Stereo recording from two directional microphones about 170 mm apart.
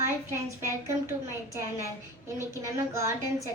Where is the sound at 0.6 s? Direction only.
15° right (ahead or behind).